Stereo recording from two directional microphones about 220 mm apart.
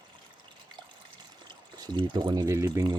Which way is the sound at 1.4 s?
20° right (ahead or behind).